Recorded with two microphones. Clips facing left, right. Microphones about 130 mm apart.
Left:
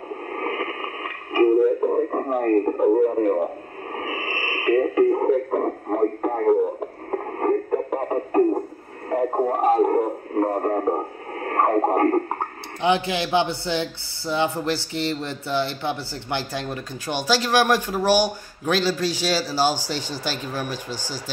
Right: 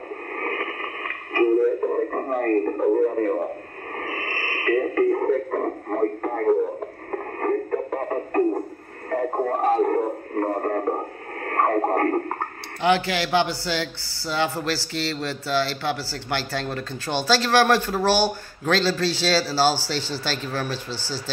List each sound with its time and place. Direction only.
0.3 s radio: 10° left (ahead or behind)
12.8 s a man's voice: 20° left (ahead or behind)